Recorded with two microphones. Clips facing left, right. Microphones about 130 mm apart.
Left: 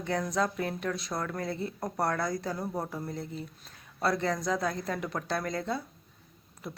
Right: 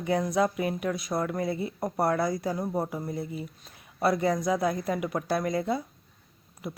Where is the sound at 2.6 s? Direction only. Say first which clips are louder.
Right 4 dB; 15° right (ahead or behind).